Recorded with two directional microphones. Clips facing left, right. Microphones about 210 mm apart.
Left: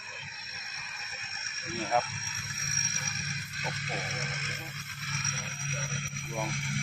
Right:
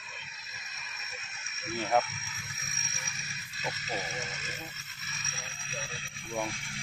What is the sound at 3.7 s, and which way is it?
Music, 50° left (ahead or behind).